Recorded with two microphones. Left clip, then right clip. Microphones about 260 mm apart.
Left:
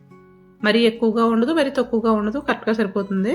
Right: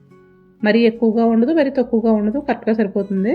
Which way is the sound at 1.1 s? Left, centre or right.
Left.